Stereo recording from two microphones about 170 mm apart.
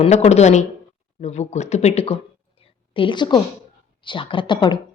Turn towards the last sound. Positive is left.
turn(degrees=30)  # may be behind; listen again after turning